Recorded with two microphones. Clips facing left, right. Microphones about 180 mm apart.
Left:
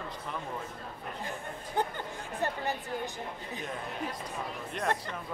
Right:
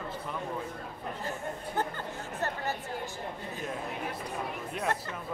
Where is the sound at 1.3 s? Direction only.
15° left (ahead or behind).